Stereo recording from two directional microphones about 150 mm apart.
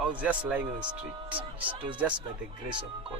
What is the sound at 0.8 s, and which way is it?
Speech, 35° right (ahead or behind).